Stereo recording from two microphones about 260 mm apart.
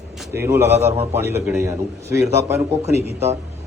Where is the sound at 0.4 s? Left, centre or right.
Centre.